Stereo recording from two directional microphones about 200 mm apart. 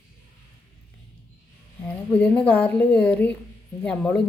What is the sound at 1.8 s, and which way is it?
A woman's voice, 5° left (ahead or behind).